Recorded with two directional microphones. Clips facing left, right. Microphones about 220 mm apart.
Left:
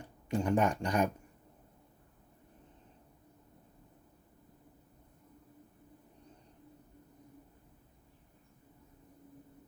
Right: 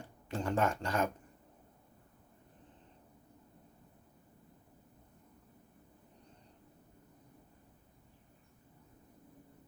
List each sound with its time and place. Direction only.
0.3 s speech: 15° left (ahead or behind)